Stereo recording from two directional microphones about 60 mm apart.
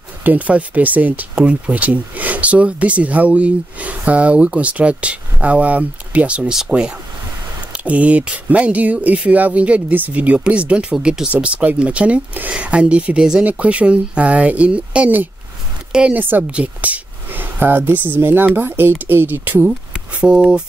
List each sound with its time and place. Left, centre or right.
0.2 s speech: right
7.7 s speech: right
16.1 s speech: right
19.9 s speech: centre